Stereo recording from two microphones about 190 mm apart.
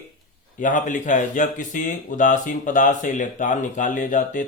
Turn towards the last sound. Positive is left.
turn(degrees=40)  # may be behind; listen again after turning